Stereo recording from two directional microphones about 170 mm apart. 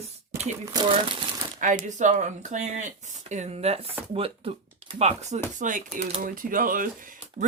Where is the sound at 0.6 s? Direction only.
25° right (ahead or behind).